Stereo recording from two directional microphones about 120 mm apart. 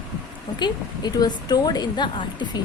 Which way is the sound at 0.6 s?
35° left (ahead or behind).